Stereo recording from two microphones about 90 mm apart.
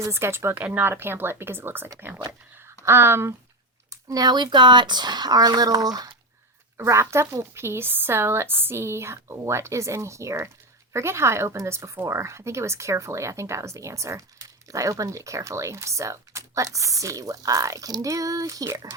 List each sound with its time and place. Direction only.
0.0 s speech: 30° right (ahead or behind)
3.8 s speech: 45° right (ahead or behind)
6.7 s speech: 30° right (ahead or behind)